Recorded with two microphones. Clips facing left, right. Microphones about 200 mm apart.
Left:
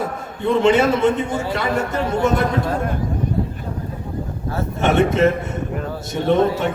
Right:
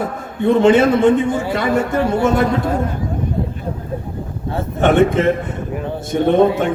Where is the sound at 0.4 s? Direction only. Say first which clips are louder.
Right 4 dB; 50° right (ahead or behind).